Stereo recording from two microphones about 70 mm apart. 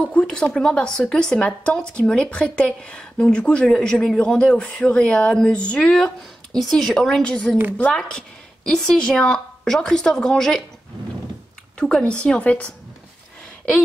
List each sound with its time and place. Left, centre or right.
0.0 s speech: centre
11.8 s speech: centre